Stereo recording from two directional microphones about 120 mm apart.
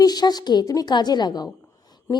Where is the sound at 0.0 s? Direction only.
35° left (ahead or behind).